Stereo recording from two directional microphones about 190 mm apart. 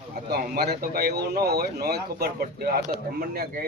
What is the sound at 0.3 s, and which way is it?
Speech, 55° right (ahead or behind).